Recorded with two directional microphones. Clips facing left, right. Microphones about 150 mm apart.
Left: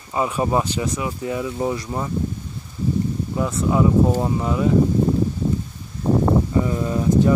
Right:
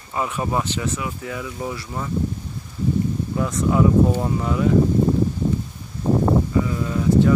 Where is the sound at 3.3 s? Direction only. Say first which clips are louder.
Even; 20° left (ahead or behind).